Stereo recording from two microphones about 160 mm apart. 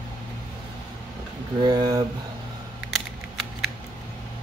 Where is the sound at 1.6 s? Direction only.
25° right (ahead or behind).